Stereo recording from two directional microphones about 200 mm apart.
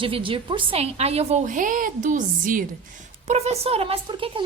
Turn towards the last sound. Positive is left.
turn(degrees=-25)  # may be behind; listen again after turning